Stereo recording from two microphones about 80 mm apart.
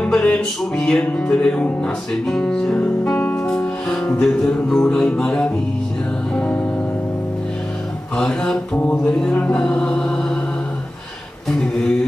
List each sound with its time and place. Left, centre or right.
0.0 s music: centre
8.2 s music: centre